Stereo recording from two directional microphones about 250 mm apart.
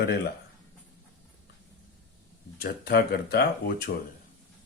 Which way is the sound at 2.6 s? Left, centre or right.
Left.